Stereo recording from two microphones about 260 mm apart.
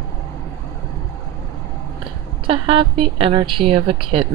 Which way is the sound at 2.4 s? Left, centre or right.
Right.